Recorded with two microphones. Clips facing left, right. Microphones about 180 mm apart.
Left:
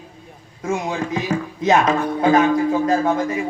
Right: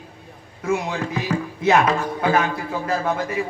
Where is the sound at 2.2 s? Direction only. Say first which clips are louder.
Left 7 dB; 35° left (ahead or behind).